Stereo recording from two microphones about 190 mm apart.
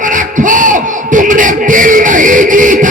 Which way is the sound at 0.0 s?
40° right (ahead or behind).